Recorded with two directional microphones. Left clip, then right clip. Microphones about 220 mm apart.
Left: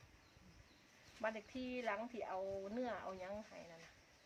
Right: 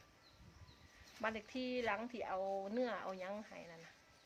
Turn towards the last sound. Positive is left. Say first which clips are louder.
# right 2 dB
turn(degrees=-55)  # may be behind; listen again after turning